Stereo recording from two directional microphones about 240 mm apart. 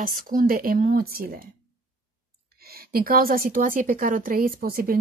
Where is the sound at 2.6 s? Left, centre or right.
Right.